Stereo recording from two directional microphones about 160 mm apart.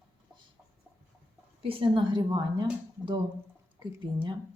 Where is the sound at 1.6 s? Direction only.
35° right (ahead or behind).